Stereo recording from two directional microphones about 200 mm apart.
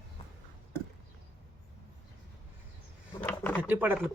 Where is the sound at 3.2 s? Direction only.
10° left (ahead or behind).